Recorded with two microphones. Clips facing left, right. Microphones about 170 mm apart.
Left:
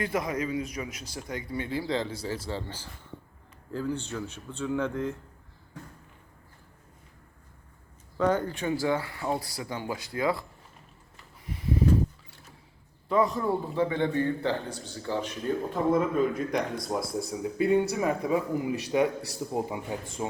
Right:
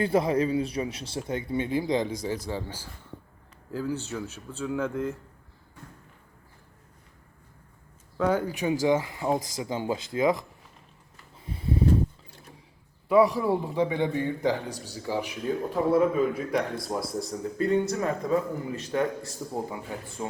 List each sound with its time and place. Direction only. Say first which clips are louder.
0.0 s speech: right 6 dB; 30° right (ahead or behind); by 5.1 s 5° right (ahead or behind)
8.2 s a man's voice: right 1 dB; 10° right (ahead or behind)
11.4 s a sound: right 1 dB; 30° right (ahead or behind)
13.1 s a man's voice: right 4 dB; 10° right (ahead or behind); by 20.0 s 15° left (ahead or behind)